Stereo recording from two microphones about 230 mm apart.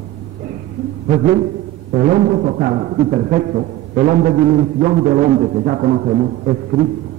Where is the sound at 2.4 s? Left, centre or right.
Right.